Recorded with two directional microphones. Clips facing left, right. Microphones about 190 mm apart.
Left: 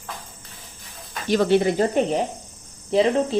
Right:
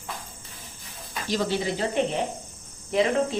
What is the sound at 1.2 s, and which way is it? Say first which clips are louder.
Speech: left 8 dB; 60° left (ahead or behind).